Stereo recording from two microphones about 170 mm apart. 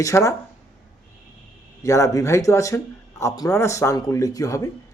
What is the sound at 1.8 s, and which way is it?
A man's voice, 20° left (ahead or behind).